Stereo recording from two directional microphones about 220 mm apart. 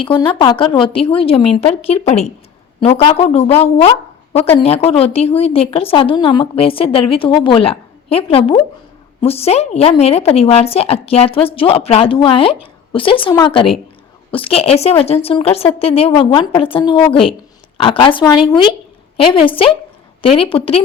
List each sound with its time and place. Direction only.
0.0 s speech: 20° left (ahead or behind)